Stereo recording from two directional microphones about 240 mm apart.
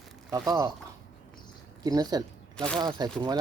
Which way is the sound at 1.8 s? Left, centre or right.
Centre.